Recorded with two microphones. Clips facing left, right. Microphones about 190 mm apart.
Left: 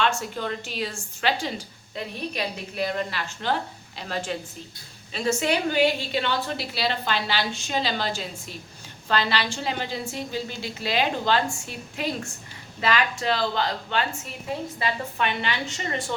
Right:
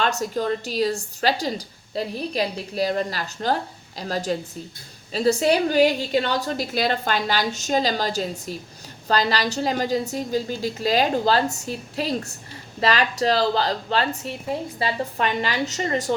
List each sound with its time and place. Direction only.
0.0 s a woman's voice: 40° right (ahead or behind)